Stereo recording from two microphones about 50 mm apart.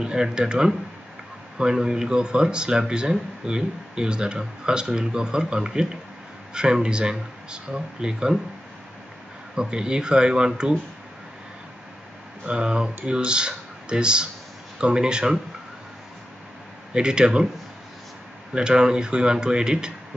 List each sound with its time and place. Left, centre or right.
0.0 s speech: centre
9.6 s speech: centre
12.4 s speech: centre
16.9 s speech: centre
18.5 s speech: centre